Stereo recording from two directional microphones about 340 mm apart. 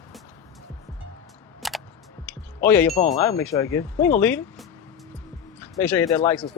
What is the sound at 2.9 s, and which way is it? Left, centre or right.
Speech, centre.